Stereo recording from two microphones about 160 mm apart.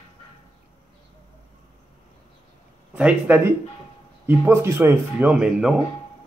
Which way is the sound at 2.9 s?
10° right (ahead or behind).